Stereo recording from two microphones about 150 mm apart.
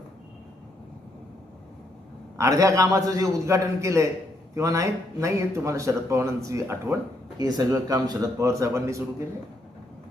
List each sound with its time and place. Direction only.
2.4 s speech: 20° right (ahead or behind)